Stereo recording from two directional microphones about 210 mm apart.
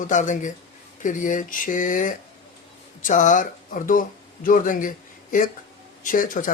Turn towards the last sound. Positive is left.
turn(degrees=40)  # may be behind; listen again after turning